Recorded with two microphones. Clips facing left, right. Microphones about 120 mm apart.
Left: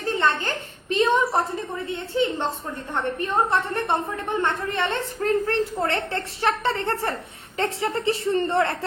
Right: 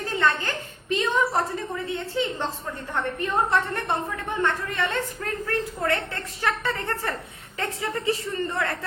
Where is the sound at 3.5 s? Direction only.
25° left (ahead or behind).